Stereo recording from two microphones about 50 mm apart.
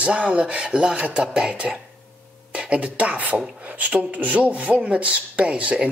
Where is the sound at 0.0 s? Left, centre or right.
Right.